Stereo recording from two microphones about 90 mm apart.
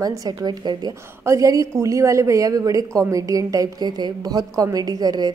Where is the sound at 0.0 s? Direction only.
40° right (ahead or behind).